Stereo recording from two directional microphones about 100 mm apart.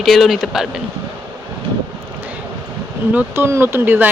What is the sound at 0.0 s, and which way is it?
Speech, centre (ahead or behind).